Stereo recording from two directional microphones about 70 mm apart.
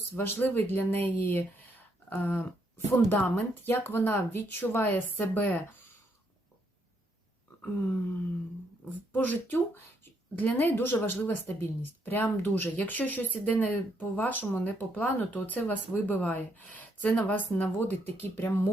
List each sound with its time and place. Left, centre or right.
0.2 s speech: left
8.8 s speech: left